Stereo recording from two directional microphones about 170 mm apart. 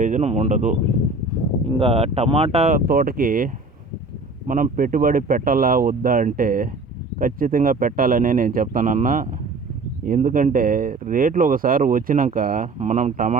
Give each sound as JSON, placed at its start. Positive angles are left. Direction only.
{"t": 0.0, "sound": "speech", "side_deg": -45}